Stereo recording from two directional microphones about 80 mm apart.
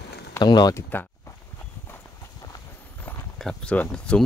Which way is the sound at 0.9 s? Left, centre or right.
Left.